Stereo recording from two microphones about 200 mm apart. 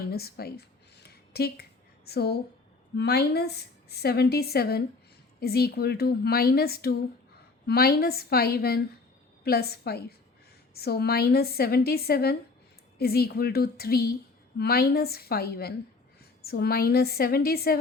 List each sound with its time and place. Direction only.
0.1 s a woman's voice: 50° left (ahead or behind)
1.0 s a sound: 50° left (ahead or behind)
2.0 s a woman's voice: 55° left (ahead or behind)